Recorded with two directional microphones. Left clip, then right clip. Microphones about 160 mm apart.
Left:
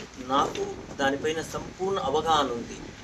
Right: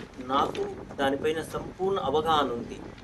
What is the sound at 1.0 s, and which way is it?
Speech, 40° right (ahead or behind).